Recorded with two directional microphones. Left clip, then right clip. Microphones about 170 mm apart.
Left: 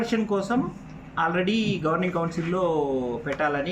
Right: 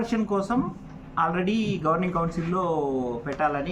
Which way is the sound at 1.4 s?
40° right (ahead or behind).